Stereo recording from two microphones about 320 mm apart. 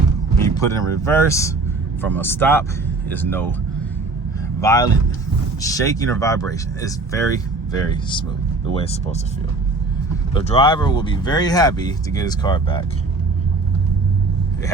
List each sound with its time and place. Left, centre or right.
0.4 s speech: centre
4.6 s speech: centre
10.3 s speech: centre